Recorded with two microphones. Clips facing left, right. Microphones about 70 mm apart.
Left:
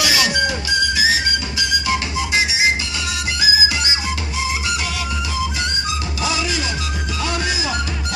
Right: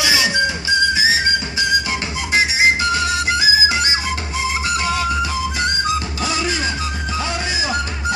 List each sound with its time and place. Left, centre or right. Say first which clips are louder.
0.0 s music: right 1 dB; centre
6.2 s music: left 1 dB; right